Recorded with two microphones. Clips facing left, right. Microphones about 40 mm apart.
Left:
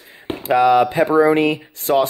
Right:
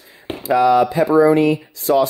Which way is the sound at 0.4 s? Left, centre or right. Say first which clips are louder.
Even; left.